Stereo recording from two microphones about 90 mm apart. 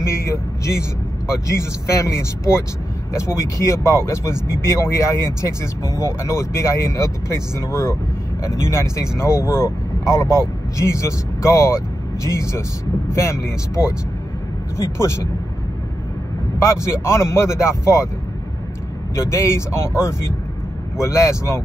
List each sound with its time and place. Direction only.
0.0 s speech: 30° left (ahead or behind)
14.8 s speech: 30° left (ahead or behind)
16.5 s speech: 30° left (ahead or behind)
19.1 s speech: 30° left (ahead or behind)